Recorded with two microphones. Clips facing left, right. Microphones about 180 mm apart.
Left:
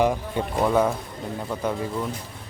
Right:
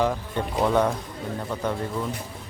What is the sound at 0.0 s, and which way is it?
Speech, 15° left (ahead or behind).